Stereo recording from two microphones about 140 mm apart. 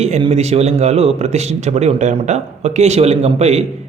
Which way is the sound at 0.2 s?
50° right (ahead or behind).